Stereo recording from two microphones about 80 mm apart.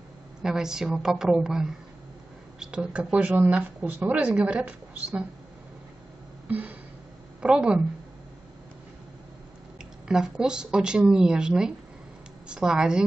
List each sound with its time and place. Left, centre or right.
0.4 s speech: centre
6.4 s music: centre
7.4 s speech: centre
10.0 s speech: centre